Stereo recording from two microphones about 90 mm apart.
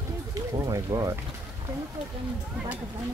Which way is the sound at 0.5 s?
35° right (ahead or behind).